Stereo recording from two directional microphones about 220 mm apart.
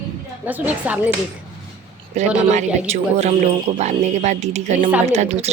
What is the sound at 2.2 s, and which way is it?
A man's voice, 30° right (ahead or behind).